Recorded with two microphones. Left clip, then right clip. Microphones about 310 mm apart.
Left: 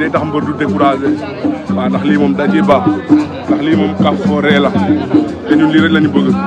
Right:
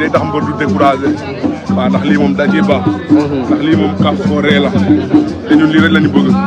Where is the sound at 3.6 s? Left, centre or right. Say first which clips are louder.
Left 2 dB; left.